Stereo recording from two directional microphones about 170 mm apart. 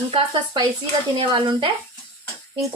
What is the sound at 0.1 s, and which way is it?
A woman's voice, 30° right (ahead or behind).